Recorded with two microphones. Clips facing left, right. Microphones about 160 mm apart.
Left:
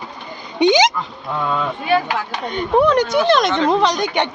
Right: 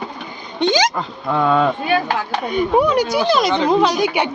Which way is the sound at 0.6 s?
15° left (ahead or behind).